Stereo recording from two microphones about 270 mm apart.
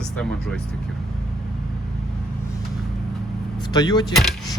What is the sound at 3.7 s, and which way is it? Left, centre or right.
Speech, centre.